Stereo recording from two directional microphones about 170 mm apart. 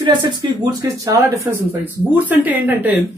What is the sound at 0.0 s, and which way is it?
A woman's voice, 25° right (ahead or behind).